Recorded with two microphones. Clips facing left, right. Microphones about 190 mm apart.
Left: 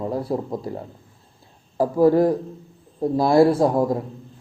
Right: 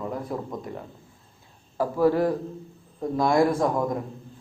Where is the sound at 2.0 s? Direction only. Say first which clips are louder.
Left 5 dB; 40° left (ahead or behind).